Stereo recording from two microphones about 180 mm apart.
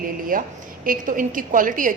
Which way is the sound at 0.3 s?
50° right (ahead or behind).